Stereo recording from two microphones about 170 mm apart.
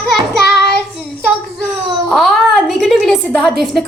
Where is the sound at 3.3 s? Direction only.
5° left (ahead or behind).